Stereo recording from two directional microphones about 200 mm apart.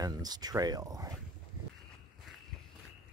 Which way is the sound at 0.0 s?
20° right (ahead or behind).